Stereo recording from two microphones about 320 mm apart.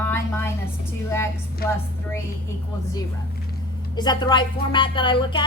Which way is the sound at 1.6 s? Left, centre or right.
Left.